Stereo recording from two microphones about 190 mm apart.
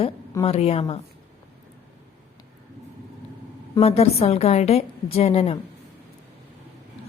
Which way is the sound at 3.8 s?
30° left (ahead or behind).